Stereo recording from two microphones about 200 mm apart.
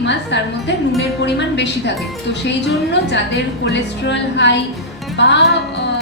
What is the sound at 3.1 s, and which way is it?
A woman's voice, 60° left (ahead or behind).